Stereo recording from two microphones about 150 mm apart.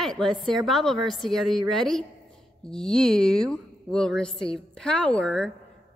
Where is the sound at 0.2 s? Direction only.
Centre (ahead or behind).